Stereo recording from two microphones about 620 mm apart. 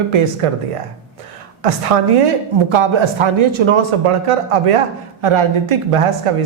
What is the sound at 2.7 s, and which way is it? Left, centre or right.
A man's voice, right.